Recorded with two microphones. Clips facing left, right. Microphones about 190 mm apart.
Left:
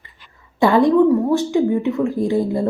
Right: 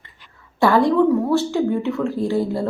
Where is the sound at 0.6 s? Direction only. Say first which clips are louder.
Left 2 dB; 20° left (ahead or behind).